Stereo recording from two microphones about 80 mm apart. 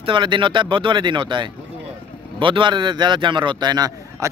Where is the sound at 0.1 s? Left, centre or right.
Right.